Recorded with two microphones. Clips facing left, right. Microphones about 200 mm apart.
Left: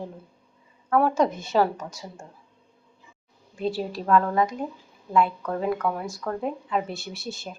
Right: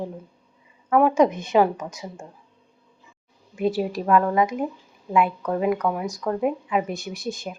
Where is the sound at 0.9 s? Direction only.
10° right (ahead or behind).